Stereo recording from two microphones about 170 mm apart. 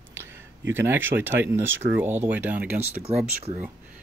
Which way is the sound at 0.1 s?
15° right (ahead or behind).